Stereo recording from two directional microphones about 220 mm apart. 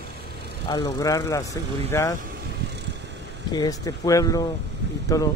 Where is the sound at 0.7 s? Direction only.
20° left (ahead or behind).